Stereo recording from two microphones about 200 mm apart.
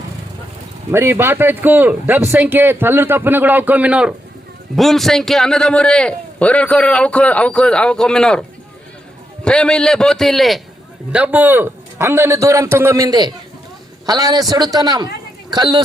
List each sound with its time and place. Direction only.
0.9 s a man's voice: 10° right (ahead or behind)